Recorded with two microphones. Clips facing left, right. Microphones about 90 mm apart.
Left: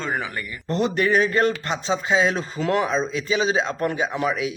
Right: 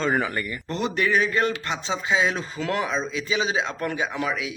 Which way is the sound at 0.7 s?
40° left (ahead or behind).